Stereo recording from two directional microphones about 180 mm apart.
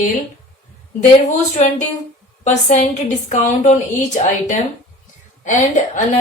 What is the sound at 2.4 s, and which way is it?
Speech, 45° left (ahead or behind).